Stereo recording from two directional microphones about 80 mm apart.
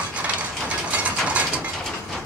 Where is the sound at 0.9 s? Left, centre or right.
Centre.